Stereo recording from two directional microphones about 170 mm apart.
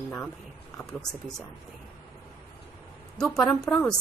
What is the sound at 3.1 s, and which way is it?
Speech, 5° left (ahead or behind).